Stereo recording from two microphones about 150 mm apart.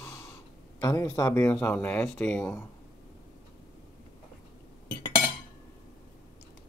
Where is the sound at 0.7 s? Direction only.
20° left (ahead or behind).